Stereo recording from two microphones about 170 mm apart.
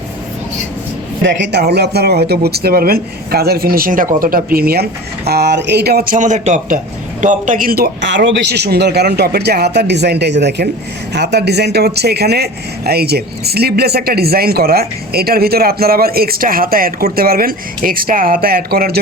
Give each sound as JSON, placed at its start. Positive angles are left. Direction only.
{"t": 1.2, "sound": "speech", "side_deg": -85}